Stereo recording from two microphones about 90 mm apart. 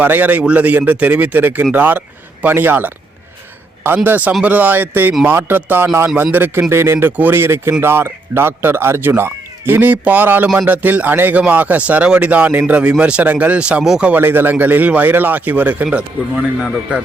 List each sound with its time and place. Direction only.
0.0 s speech: 20° right (ahead or behind)
14.2 s speech: 25° right (ahead or behind)